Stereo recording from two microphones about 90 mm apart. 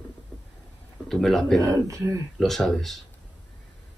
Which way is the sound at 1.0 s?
5° left (ahead or behind).